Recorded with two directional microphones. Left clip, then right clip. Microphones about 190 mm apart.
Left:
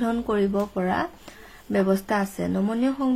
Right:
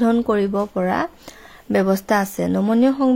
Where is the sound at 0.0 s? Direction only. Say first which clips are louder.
Right 6 dB; 30° right (ahead or behind).